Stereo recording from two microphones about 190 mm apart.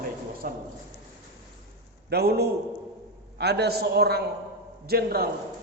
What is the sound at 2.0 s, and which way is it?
A man's voice, 55° right (ahead or behind).